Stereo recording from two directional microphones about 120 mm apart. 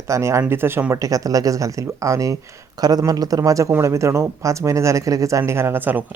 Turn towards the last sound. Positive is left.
turn(degrees=-15)  # may be behind; listen again after turning